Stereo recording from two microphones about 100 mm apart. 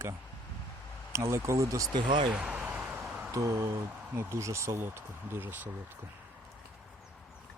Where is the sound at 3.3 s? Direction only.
30° right (ahead or behind).